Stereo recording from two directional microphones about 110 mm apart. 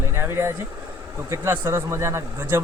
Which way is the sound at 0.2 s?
25° right (ahead or behind).